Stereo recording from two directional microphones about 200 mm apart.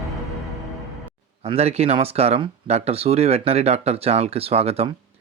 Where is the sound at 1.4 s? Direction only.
30° right (ahead or behind).